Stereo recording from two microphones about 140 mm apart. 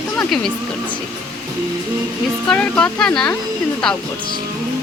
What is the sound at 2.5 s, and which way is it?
Speech, 10° left (ahead or behind).